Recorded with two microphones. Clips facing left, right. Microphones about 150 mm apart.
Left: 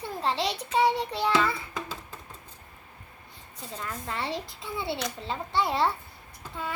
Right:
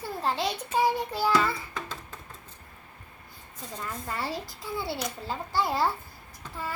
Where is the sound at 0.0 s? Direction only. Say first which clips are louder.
Even; centre (ahead or behind).